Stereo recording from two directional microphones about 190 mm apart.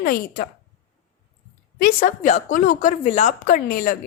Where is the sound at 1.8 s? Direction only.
45° left (ahead or behind).